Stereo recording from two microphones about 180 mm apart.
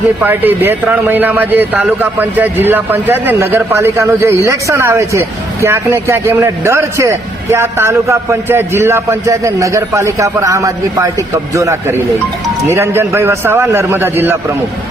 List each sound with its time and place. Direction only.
0.2 s a man's voice: 10° right (ahead or behind)